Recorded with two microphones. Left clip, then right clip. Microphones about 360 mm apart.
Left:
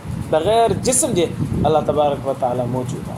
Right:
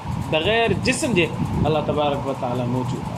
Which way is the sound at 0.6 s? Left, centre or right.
Left.